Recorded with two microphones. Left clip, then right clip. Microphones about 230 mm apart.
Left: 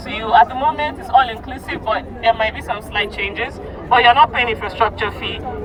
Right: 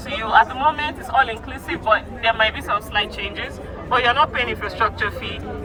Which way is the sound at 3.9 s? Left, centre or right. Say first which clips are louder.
Left 6 dB; centre.